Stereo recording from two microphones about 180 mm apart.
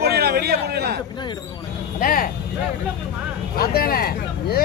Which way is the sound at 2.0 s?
50° left (ahead or behind).